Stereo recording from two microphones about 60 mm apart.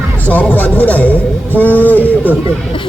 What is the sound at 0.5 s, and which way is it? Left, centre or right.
A man's voice, left.